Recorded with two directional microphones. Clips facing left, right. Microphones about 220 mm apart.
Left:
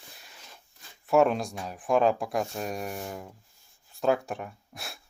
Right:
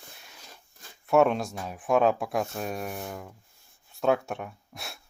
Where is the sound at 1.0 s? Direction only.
Centre (ahead or behind).